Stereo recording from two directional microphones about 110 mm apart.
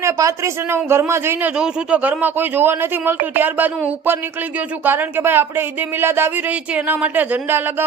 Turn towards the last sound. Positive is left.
turn(degrees=-20)  # may be behind; listen again after turning